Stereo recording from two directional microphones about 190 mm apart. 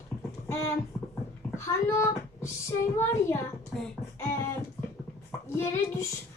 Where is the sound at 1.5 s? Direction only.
15° left (ahead or behind).